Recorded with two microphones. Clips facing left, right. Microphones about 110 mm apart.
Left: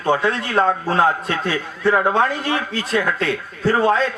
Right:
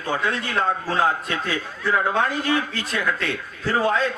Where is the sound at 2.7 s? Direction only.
35° left (ahead or behind).